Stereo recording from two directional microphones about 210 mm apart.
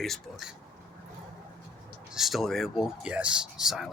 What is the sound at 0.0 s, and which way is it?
Speech, centre (ahead or behind).